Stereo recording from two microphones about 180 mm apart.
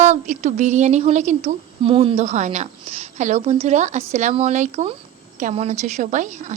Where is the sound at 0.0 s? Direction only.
40° right (ahead or behind).